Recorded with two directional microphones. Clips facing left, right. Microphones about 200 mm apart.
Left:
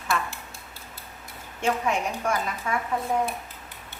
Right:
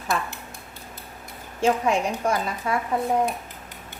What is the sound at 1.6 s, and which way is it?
A woman's voice, 35° right (ahead or behind).